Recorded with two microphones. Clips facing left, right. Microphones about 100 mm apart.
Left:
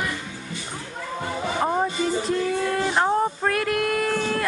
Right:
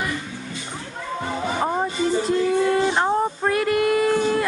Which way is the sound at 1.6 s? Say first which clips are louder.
Left 1 dB; centre (ahead or behind).